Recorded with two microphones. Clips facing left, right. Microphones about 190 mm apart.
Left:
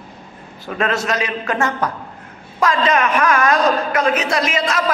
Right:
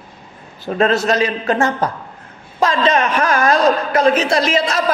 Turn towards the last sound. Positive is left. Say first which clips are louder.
# right 3 dB
turn(degrees=-30)  # may be behind; listen again after turning